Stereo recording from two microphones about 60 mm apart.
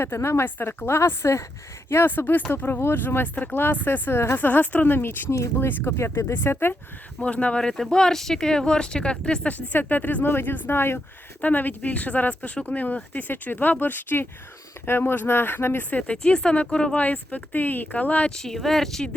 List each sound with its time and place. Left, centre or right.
0.0 s a woman's voice: left
2.0 s speech: left
7.2 s speech: left
9.7 s speech: left
11.5 s speech: left
15.9 s speech: left
17.0 s speech: left
18.3 s speech: centre